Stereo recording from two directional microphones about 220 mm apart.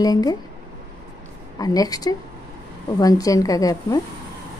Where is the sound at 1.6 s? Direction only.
15° left (ahead or behind).